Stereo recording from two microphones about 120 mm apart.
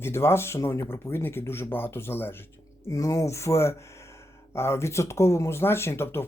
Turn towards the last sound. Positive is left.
turn(degrees=20)  # may be behind; listen again after turning